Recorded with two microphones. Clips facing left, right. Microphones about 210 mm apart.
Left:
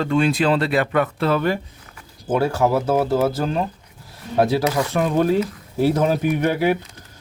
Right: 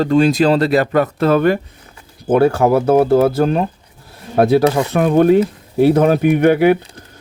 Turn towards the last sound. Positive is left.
turn(degrees=-60)  # may be behind; listen again after turning